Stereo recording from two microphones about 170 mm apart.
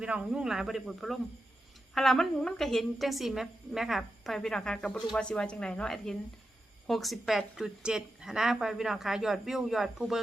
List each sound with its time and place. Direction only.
0.0 s a woman's voice: 5° right (ahead or behind)